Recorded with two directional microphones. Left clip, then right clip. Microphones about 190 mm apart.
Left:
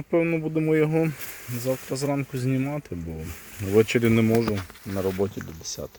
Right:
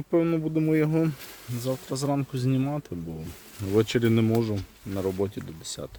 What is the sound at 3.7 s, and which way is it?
Speech, 5° left (ahead or behind).